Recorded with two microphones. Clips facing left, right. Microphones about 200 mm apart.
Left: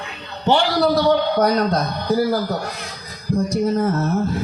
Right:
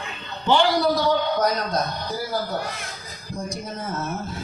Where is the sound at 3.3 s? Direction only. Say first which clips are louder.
Left 13 dB; 65° left (ahead or behind).